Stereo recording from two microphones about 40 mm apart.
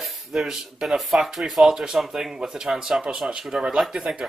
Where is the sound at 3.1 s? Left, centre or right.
Right.